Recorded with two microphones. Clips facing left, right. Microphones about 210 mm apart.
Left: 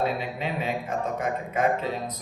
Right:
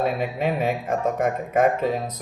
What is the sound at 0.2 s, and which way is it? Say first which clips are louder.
Speech: right 6 dB; 50° right (ahead or behind).